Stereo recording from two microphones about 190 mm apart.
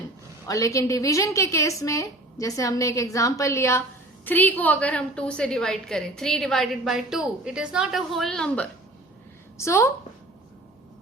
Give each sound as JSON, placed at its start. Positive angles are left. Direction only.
{"t": 0.4, "sound": "a woman's voice", "side_deg": 15}
{"t": 9.6, "sound": "a woman's voice", "side_deg": 15}